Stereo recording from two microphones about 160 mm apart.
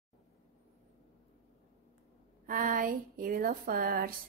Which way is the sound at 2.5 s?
60° right (ahead or behind).